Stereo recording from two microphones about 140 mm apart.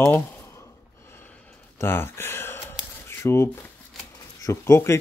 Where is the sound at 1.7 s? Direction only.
15° left (ahead or behind).